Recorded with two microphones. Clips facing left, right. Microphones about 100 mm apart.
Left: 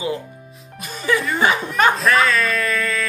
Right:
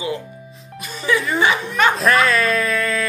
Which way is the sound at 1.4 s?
40° left (ahead or behind).